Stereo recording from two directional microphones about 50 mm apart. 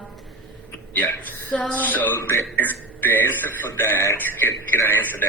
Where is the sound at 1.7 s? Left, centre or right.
Left.